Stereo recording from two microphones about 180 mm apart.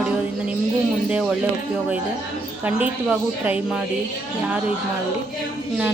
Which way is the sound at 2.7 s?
10° right (ahead or behind).